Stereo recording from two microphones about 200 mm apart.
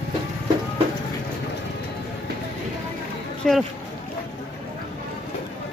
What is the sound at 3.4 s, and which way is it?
Speech, centre (ahead or behind).